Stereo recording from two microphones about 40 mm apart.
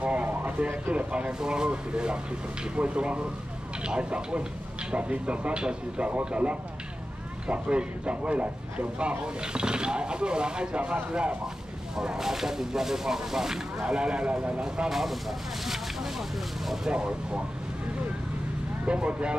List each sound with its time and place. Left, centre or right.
0.0 s a sound: right
0.3 s a sound: right
0.9 s speech: right
12.0 s speech: centre
13.8 s speech: right
14.9 s speech: centre
16.9 s speech: right
18.9 s speech: right